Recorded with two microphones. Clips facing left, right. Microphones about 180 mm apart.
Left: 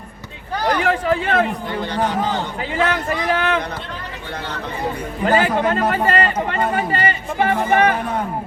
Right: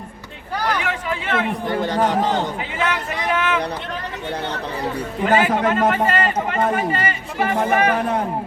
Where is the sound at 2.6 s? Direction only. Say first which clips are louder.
Left 3 dB; 35° left (ahead or behind).